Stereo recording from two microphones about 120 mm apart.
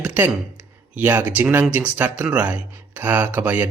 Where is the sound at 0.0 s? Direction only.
15° right (ahead or behind).